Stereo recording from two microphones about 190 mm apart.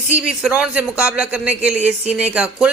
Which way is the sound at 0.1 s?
5° right (ahead or behind).